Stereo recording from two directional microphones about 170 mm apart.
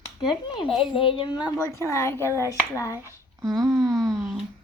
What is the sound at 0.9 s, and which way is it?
Speech, 30° left (ahead or behind).